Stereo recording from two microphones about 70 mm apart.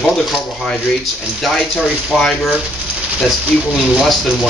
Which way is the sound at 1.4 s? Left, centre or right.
Centre.